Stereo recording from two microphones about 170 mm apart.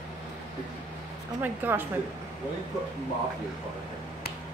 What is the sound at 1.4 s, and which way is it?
Speech, 10° right (ahead or behind).